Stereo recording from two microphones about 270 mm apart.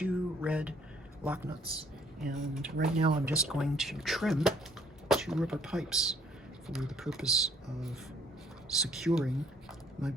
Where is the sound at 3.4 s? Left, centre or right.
Centre.